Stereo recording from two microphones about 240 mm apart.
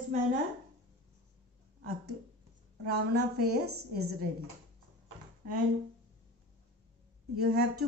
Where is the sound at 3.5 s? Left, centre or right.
Right.